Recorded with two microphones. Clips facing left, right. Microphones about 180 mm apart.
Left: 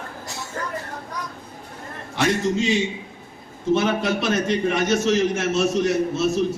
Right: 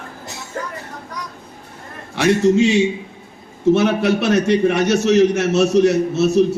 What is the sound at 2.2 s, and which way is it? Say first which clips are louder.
A man's voice: right 7 dB; 70° right (ahead or behind).